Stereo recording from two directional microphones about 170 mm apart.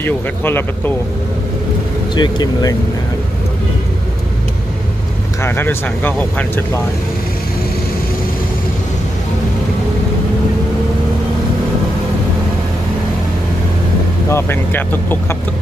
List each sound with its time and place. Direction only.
0.0 s speech: 10° left (ahead or behind)
2.1 s speech: 25° left (ahead or behind)
5.4 s speech: 15° left (ahead or behind)
14.3 s speech: 10° left (ahead or behind)